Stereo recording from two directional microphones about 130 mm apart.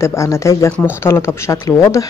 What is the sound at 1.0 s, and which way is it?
Speech, 20° left (ahead or behind).